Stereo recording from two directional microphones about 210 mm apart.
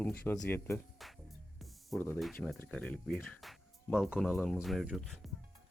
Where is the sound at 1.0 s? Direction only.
Centre (ahead or behind).